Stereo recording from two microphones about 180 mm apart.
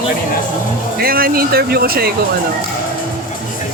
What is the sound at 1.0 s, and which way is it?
Speech, 55° right (ahead or behind).